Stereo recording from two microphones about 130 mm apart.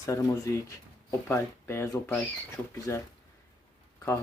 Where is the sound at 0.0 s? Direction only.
25° left (ahead or behind).